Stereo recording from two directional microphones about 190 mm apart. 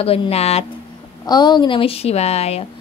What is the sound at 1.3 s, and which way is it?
Speech, 20° left (ahead or behind).